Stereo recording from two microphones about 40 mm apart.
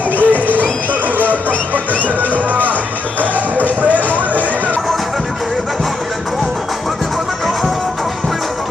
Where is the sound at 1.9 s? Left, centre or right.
Right.